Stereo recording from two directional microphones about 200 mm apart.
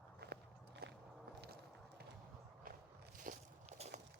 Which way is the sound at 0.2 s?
55° right (ahead or behind).